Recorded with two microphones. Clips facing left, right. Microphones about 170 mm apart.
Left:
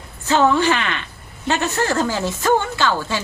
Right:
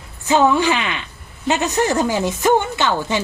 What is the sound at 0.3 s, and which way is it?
A woman's voice, 15° right (ahead or behind).